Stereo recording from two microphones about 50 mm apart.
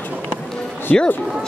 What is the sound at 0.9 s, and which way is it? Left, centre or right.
Speech, centre.